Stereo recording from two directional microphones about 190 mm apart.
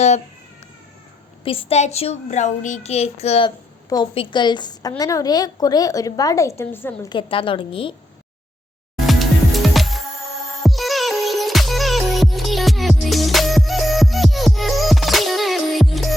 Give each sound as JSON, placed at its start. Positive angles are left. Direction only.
{"t": 1.5, "sound": "a woman's voice", "side_deg": 30}
{"t": 7.1, "sound": "a woman's voice", "side_deg": 25}
{"t": 9.0, "sound": "music", "side_deg": 0}